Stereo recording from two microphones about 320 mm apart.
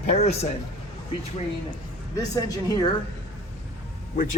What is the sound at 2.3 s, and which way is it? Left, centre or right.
Speech, centre.